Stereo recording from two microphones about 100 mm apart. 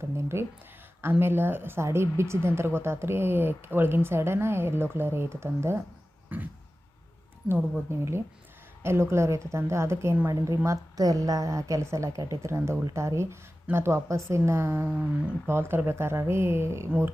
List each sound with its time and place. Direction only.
0.3 s a woman's voice: 25° right (ahead or behind)
6.3 s a sound: 20° right (ahead or behind)
7.4 s a woman's voice: 25° right (ahead or behind)